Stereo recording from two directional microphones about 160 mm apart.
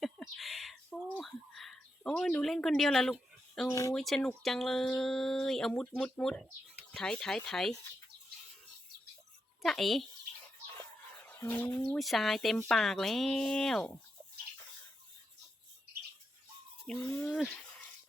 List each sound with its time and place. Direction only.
0.0 s bird: centre (ahead or behind)
2.1 s a woman's voice: 5° left (ahead or behind)
3.7 s speech: 20° left (ahead or behind)
3.9 s speech: centre (ahead or behind)
9.6 s speech: centre (ahead or behind)
11.2 s speech: 15° left (ahead or behind)
16.8 s speech: 5° left (ahead or behind)